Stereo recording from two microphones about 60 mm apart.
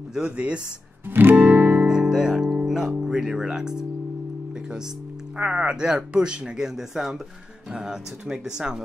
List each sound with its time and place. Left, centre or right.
0.1 s speech: centre
1.3 s music: right
1.9 s music: centre
3.0 s speech: centre
5.4 s speech: centre